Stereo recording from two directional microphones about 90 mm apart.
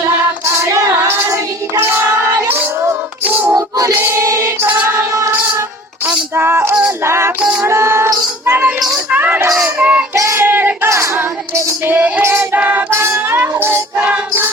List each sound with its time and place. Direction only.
0.6 s female singing: 35° right (ahead or behind)
1.0 s female singing: 25° right (ahead or behind)
3.5 s music: 45° right (ahead or behind)
3.9 s choir: 25° right (ahead or behind)
6.3 s music: 25° right (ahead or behind)
7.4 s female singing: 5° right (ahead or behind)
7.7 s music: 30° right (ahead or behind)
9.1 s a sound: 20° right (ahead or behind)
9.7 s child singing: 15° right (ahead or behind)
10.2 s child singing: 35° right (ahead or behind)
10.4 s a sound: 20° right (ahead or behind)
11.9 s female singing: 15° right (ahead or behind)
12.2 s female singing: 30° right (ahead or behind)
12.5 s music: 20° right (ahead or behind)